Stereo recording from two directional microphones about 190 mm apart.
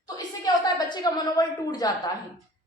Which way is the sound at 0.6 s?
20° left (ahead or behind).